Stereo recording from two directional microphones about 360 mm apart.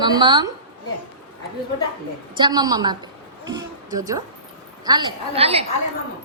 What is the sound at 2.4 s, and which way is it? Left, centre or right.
A woman's voice, centre.